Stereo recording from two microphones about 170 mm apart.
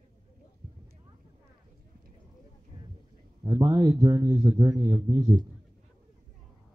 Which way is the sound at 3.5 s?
20° right (ahead or behind).